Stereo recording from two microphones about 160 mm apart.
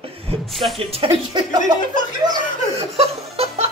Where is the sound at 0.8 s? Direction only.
35° right (ahead or behind).